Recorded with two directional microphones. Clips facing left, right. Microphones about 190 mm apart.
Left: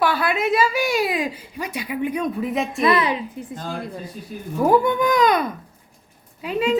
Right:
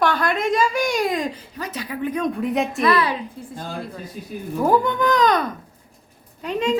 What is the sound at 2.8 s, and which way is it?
Speech, 20° left (ahead or behind).